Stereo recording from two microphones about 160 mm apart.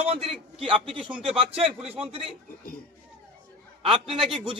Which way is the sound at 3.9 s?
Centre (ahead or behind).